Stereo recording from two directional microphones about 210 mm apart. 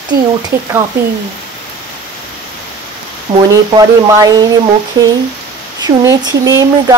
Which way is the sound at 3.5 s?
15° right (ahead or behind).